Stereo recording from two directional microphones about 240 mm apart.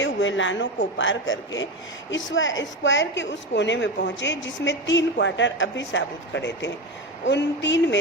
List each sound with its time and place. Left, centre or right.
0.0 s a woman's voice: left